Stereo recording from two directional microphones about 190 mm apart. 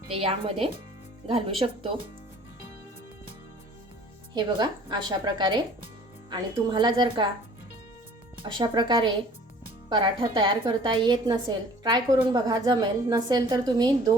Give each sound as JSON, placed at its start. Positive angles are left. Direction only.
{"t": 0.1, "sound": "a woman's voice", "side_deg": -30}
{"t": 4.4, "sound": "a woman's voice", "side_deg": -25}
{"t": 8.4, "sound": "a woman's voice", "side_deg": -25}